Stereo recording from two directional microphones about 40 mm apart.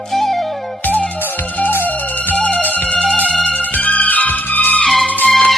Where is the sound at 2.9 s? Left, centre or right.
Left.